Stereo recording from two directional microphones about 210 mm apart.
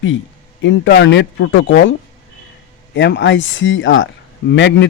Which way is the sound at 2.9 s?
55° left (ahead or behind).